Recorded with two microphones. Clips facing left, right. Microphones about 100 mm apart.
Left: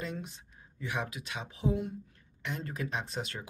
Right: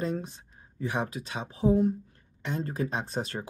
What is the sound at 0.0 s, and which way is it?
Speech, 35° right (ahead or behind).